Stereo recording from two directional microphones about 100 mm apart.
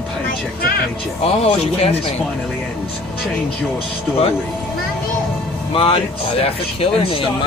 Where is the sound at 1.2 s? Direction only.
90° left.